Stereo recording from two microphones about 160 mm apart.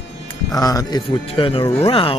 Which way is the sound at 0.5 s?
20° left (ahead or behind).